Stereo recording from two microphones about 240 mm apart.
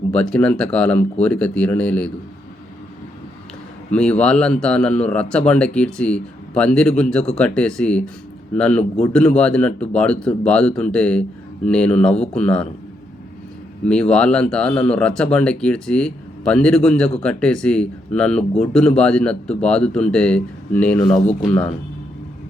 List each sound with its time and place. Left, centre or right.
0.1 s speech: centre
3.9 s speech: centre
13.8 s speech: centre